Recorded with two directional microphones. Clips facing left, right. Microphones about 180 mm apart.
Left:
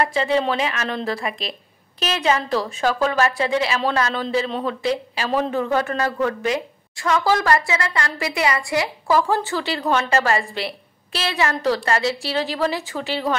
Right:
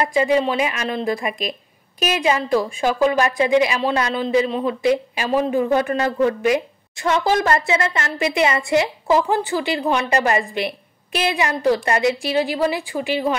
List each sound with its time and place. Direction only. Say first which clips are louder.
0.0 s speech: right 2 dB; 15° right (ahead or behind)